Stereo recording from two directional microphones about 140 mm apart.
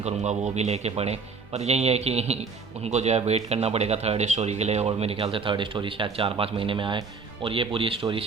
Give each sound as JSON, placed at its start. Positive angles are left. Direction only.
{"t": 0.0, "sound": "speech", "side_deg": -55}